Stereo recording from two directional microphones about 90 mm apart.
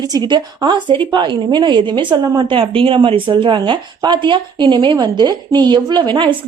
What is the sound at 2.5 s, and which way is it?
A woman's voice, 80° right.